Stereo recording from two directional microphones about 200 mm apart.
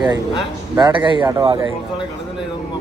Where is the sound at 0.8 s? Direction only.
25° right (ahead or behind).